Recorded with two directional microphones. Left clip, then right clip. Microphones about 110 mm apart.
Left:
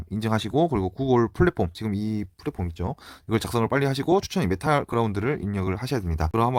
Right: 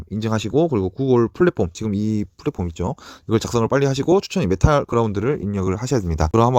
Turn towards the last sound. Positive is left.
turn(degrees=-45)  # may be behind; listen again after turning